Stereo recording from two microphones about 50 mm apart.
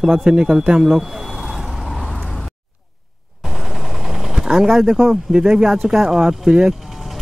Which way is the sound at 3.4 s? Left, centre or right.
Centre.